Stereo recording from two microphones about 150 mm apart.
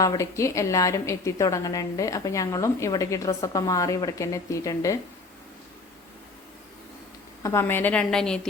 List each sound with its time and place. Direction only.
0.0 s a woman's voice: 20° left (ahead or behind)
7.4 s a woman's voice: 15° left (ahead or behind)